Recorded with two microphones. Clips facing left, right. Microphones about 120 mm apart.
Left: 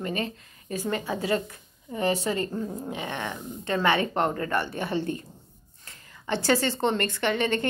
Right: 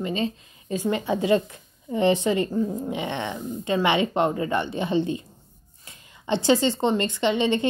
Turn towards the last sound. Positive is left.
turn(degrees=-15)  # may be behind; listen again after turning